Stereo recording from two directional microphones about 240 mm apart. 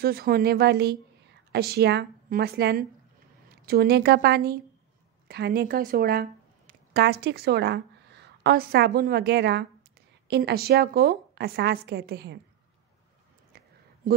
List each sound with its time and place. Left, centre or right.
0.0 s a woman's voice: right